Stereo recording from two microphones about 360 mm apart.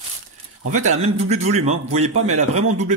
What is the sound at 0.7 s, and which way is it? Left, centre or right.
Speech, centre.